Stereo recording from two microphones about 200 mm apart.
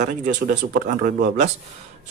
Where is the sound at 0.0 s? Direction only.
40° right (ahead or behind).